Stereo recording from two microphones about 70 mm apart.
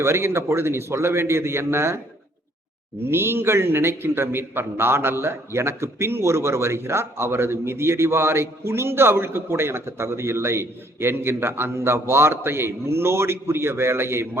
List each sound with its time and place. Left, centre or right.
0.0 s a man's voice: right
3.1 s a man's voice: right